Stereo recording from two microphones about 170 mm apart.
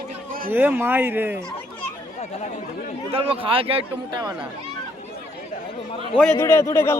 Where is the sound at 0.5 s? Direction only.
10° right (ahead or behind).